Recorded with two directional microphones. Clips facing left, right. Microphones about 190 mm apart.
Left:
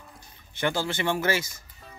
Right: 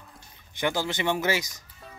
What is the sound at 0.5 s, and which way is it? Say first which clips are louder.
Speech: even; 15° right (ahead or behind).